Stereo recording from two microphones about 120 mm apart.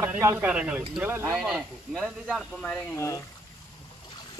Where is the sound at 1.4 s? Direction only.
5° right (ahead or behind).